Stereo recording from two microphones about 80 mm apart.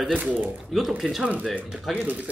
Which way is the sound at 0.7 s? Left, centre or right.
Centre.